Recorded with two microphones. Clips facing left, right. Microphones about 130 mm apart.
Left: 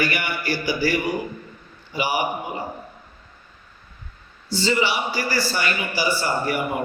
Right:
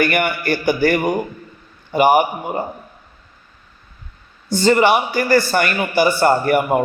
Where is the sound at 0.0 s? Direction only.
55° right (ahead or behind).